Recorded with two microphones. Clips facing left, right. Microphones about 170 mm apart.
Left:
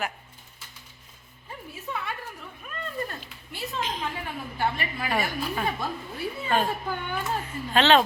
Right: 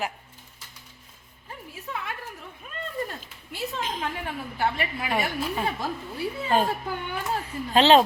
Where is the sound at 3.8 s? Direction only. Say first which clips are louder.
Left 3 dB; 45° right (ahead or behind).